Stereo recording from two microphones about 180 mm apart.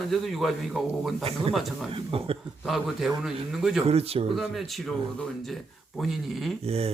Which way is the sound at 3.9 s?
35° right (ahead or behind).